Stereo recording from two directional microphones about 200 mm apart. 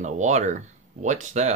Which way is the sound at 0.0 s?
35° right (ahead or behind).